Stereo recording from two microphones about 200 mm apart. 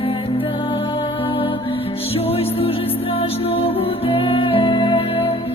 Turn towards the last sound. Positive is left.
turn(degrees=30)  # may be behind; listen again after turning